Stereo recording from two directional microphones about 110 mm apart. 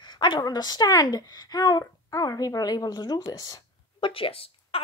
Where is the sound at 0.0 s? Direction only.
45° left (ahead or behind).